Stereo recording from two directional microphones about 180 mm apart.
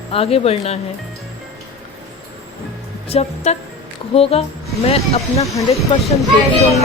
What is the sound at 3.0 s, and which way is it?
A woman's voice, 35° left (ahead or behind).